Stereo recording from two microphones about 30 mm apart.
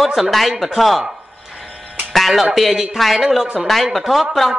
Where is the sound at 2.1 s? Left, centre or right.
Centre.